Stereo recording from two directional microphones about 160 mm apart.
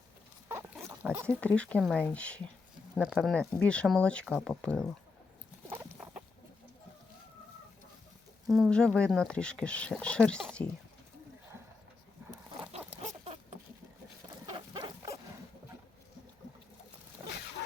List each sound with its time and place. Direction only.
0.4 s pig: 15° right (ahead or behind)
1.3 s speech: 10° left (ahead or behind)
3.0 s speech: 10° right (ahead or behind)
3.2 s speech: 5° left (ahead or behind)
5.6 s fowl: 15° right (ahead or behind)
8.4 s speech: centre (ahead or behind)
14.5 s rodents: 30° right (ahead or behind)